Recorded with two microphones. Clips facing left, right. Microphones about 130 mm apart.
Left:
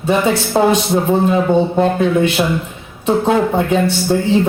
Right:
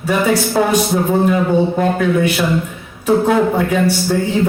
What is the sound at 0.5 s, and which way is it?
A man's voice, 25° left (ahead or behind).